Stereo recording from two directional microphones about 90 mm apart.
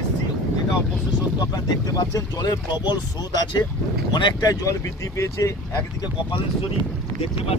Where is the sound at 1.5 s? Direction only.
45° left (ahead or behind).